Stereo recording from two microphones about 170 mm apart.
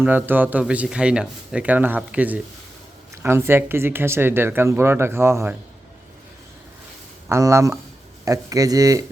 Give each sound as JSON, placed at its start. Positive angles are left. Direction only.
{"t": 0.0, "sound": "speech", "side_deg": -10}
{"t": 7.3, "sound": "speech", "side_deg": -15}